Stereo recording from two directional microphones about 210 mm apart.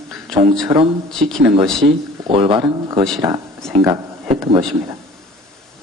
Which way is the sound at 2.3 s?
25° right (ahead or behind).